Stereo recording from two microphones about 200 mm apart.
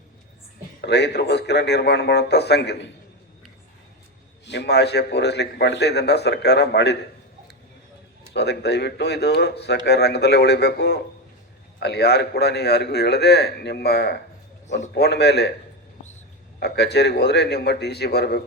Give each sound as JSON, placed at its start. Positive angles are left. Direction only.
{"t": 0.8, "sound": "a man's voice", "side_deg": 55}
{"t": 4.4, "sound": "a man's voice", "side_deg": 55}
{"t": 8.3, "sound": "a man's voice", "side_deg": 55}
{"t": 16.6, "sound": "a man's voice", "side_deg": 55}